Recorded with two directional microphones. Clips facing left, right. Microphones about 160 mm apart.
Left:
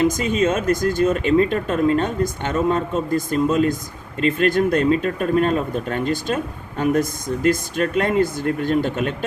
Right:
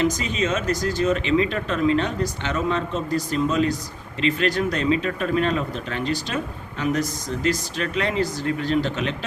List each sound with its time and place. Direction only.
0.0 s speech: 50° left (ahead or behind)